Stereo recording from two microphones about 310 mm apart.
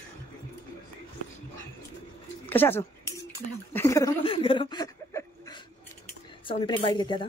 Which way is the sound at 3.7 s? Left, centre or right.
Centre.